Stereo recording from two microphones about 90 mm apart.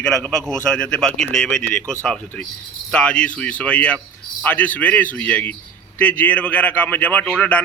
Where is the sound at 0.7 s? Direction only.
10° left (ahead or behind).